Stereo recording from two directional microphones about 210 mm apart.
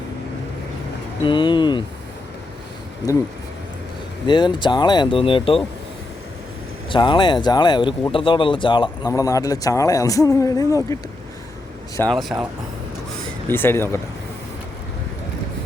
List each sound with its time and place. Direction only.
1.2 s speech: 25° left (ahead or behind)
3.0 s speech: 20° left (ahead or behind)
4.3 s speech: 20° left (ahead or behind)
6.9 s speech: 20° left (ahead or behind)
11.9 s speech: 5° left (ahead or behind)
13.5 s speech: 10° left (ahead or behind)